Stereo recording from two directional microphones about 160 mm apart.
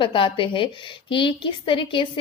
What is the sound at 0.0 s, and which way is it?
A woman's voice, 30° left (ahead or behind).